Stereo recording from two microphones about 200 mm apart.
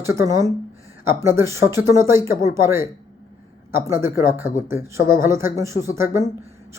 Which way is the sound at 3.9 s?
10° right (ahead or behind).